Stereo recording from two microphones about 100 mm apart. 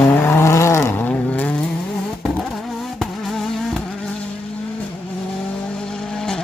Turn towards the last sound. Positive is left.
turn(degrees=5)  # may be behind; listen again after turning